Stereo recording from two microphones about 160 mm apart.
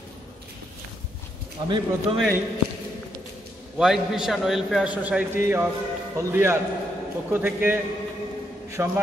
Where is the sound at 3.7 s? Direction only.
Centre (ahead or behind).